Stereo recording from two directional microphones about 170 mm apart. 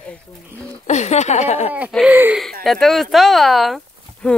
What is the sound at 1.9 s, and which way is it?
Speech, 10° right (ahead or behind).